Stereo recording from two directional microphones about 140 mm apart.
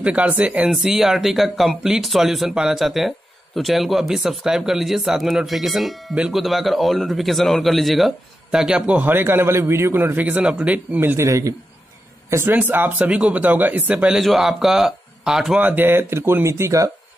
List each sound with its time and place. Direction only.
0.0 s speech: 10° right (ahead or behind)
15.6 s speech: 15° right (ahead or behind)